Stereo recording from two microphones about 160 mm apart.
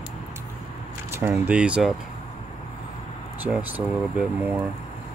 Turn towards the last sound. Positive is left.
turn(degrees=-10)  # may be behind; listen again after turning